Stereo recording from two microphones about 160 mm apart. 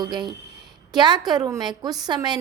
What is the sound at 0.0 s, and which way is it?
A child's voice, 30° right (ahead or behind).